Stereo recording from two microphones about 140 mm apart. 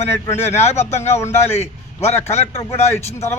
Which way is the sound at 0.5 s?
50° left (ahead or behind).